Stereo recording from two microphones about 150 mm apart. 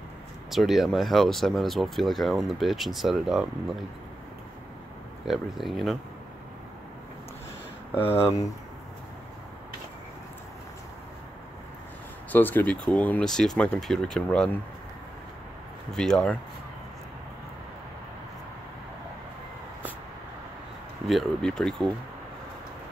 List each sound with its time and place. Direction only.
0.5 s speech: centre (ahead or behind)
5.2 s speech: centre (ahead or behind)
7.9 s speech: 15° left (ahead or behind)
12.3 s speech: 10° left (ahead or behind)
15.9 s speech: 5° left (ahead or behind)
21.1 s speech: centre (ahead or behind)